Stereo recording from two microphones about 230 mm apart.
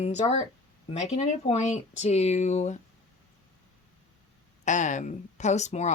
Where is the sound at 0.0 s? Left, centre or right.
Left.